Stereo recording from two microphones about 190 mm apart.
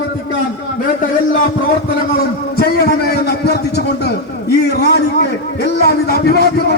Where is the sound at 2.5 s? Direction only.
55° left (ahead or behind).